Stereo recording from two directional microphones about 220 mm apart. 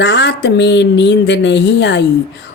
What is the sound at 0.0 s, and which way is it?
A woman's voice, 50° left (ahead or behind).